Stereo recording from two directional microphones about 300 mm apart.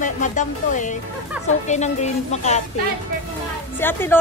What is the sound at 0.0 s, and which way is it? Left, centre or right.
A woman's voice, left.